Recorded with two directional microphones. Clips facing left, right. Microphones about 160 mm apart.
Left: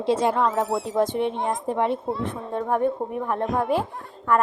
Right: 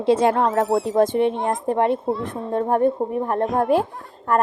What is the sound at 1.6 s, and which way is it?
A woman's voice, 50° right (ahead or behind).